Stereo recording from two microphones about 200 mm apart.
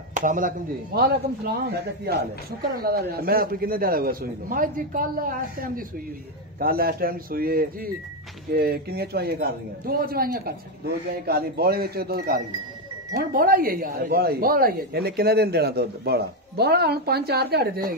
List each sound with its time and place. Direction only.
0.1 s speech: 40° right (ahead or behind)